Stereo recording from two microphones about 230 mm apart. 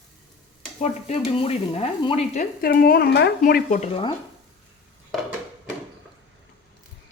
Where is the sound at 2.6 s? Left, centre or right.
Left.